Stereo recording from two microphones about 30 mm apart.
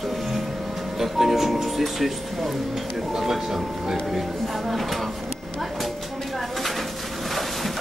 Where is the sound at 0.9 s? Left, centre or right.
Centre.